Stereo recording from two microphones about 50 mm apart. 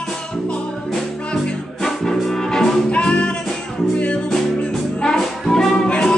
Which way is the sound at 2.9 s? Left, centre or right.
Left.